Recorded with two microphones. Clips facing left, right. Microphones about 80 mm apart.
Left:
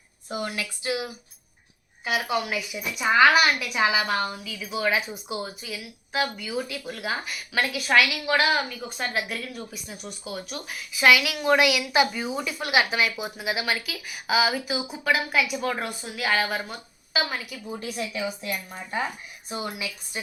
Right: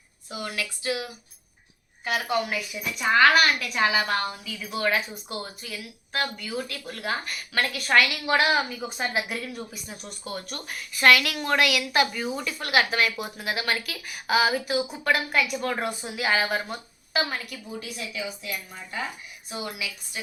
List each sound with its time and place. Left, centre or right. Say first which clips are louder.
0.4 s speech: right 2 dB; left
2.0 s a woman's voice: even; centre
17.7 s speech: left 5 dB; left